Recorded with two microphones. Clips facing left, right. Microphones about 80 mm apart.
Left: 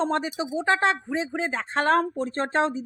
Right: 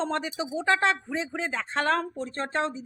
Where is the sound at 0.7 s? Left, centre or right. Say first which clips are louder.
Left 1 dB; centre.